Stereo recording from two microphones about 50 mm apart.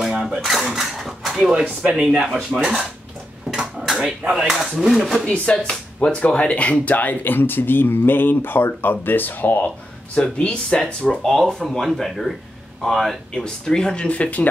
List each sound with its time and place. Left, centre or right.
0.0 s cutlery: centre
0.4 s cutlery: centre
0.7 s a sound: centre
1.9 s speech: centre
2.5 s speech: centre
3.4 s a sound: centre
4.2 s speech: right
4.5 s speech: centre
5.2 s speech: left
10.1 s speech: left
10.8 s speech: centre
13.3 s speech: centre
14.0 s speech: left